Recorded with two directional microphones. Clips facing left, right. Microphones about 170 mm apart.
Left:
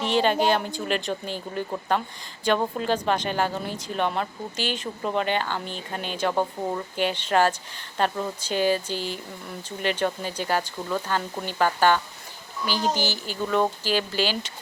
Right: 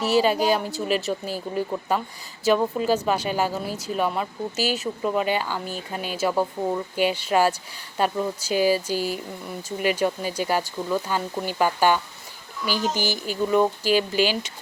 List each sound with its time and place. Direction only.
0.0 s speech: 5° right (ahead or behind)
12.6 s speech: 45° right (ahead or behind)
13.5 s speech: 10° right (ahead or behind)